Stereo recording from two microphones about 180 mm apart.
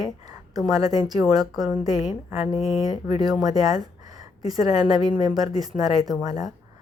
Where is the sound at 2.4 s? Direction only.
30° left (ahead or behind).